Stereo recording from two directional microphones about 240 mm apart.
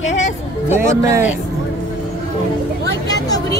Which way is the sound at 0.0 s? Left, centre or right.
Left.